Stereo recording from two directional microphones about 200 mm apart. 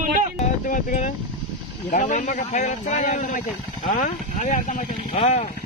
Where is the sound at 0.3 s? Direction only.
35° left (ahead or behind).